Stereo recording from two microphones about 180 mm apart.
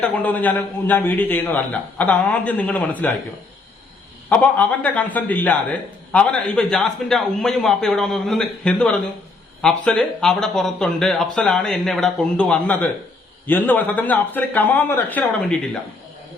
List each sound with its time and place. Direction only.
0.0 s speech: 10° left (ahead or behind)
4.3 s speech: 10° left (ahead or behind)